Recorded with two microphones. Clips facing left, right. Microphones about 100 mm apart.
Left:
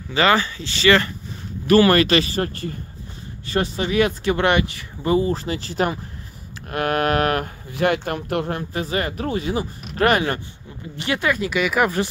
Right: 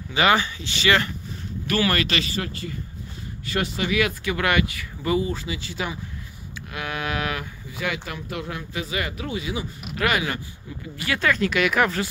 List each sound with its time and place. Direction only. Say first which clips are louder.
0.1 s speech: left 2 dB; 15° right (ahead or behind)
1.7 s speech: left 9 dB; 40° left (ahead or behind)
3.4 s speech: left 3 dB; 35° left (ahead or behind)
5.8 s speech: left 9 dB; 50° left (ahead or behind)
6.7 s a sound: left 9 dB; 55° left (ahead or behind)
7.8 s speech: left 9 dB; 50° left (ahead or behind)
11.0 s speech: left 1 dB; 20° left (ahead or behind)